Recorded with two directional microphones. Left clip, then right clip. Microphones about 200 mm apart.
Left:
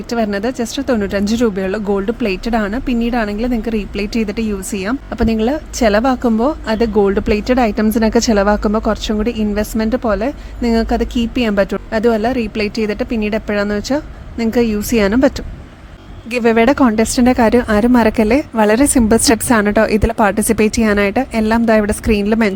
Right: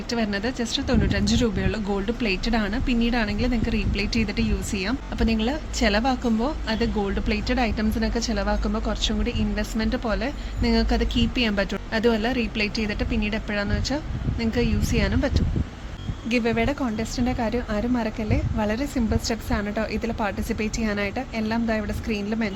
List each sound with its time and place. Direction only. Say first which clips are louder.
0.1 s speech: left 9 dB; 50° left (ahead or behind)